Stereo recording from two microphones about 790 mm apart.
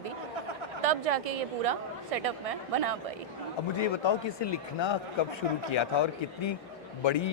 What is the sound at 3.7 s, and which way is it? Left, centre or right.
Speech, left.